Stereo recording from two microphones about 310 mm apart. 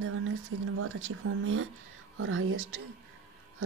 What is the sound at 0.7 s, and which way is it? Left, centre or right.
Speech, right.